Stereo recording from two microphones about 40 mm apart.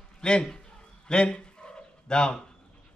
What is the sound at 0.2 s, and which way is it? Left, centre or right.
Speech, left.